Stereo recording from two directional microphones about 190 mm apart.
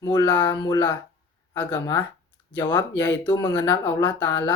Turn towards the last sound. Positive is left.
turn(degrees=15)  # may be behind; listen again after turning